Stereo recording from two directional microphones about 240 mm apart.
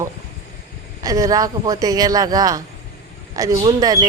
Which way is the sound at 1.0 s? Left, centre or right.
Centre.